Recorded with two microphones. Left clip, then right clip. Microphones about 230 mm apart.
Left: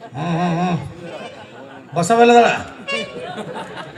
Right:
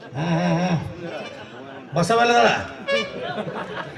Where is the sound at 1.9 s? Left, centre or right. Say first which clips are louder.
Left 6 dB; left.